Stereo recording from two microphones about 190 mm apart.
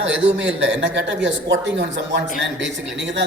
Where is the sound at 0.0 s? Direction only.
75° right (ahead or behind).